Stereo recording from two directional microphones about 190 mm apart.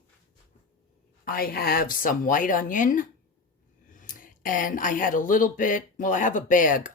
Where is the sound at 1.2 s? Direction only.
50° left (ahead or behind).